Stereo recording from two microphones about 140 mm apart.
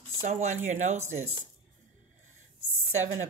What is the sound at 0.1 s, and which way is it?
Speech, 50° right (ahead or behind).